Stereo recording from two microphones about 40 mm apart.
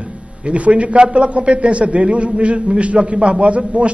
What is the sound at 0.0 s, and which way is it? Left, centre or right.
A man's voice, right.